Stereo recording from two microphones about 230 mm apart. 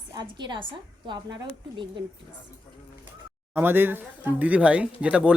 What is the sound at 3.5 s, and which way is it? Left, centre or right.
Speech, centre.